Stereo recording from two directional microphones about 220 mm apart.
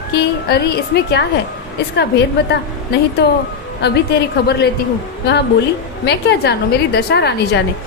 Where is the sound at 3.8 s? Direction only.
50° left (ahead or behind).